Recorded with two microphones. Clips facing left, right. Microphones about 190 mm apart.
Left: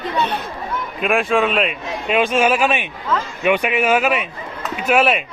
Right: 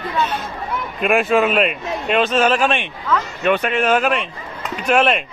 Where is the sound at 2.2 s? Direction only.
10° left (ahead or behind).